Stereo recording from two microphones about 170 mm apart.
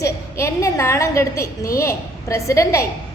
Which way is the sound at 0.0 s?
15° left (ahead or behind).